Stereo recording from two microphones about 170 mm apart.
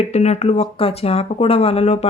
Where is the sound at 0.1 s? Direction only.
40° left (ahead or behind).